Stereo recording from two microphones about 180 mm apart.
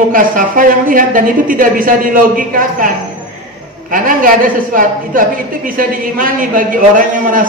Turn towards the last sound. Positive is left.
turn(degrees=-50)  # may be behind; listen again after turning